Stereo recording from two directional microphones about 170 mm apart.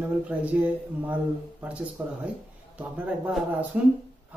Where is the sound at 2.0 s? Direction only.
10° right (ahead or behind).